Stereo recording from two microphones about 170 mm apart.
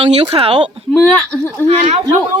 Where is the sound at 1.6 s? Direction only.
35° right (ahead or behind).